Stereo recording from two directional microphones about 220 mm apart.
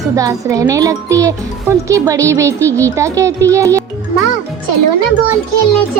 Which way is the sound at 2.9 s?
15° right (ahead or behind).